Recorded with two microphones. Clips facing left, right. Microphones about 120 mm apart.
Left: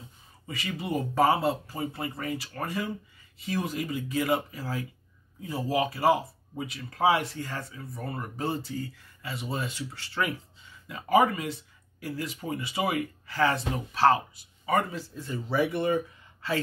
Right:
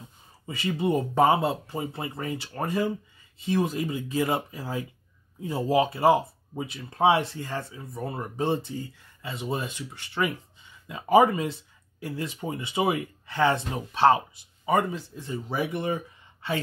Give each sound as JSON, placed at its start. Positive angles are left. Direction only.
{"t": 0.5, "sound": "speech", "side_deg": -25}